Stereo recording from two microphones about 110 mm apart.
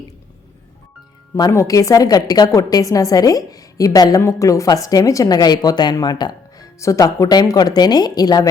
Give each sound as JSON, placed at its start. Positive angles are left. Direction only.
{"t": 1.4, "sound": "a woman's voice", "side_deg": 30}
{"t": 6.7, "sound": "a woman's voice", "side_deg": 30}